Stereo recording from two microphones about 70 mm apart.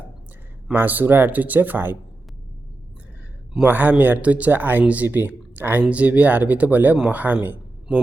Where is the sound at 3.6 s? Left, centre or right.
Right.